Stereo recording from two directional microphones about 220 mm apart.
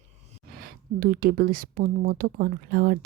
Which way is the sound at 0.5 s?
40° right (ahead or behind).